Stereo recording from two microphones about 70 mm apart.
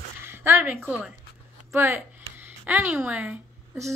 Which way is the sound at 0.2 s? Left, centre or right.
Right.